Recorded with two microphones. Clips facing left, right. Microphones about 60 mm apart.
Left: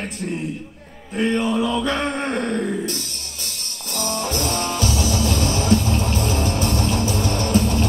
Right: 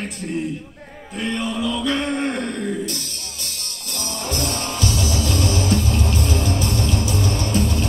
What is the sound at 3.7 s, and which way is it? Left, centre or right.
Music, left.